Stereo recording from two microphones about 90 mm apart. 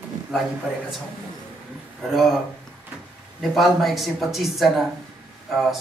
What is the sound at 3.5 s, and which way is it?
Speech, centre (ahead or behind).